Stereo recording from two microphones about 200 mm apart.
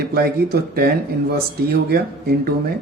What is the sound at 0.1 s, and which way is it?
Speech, 50° right (ahead or behind).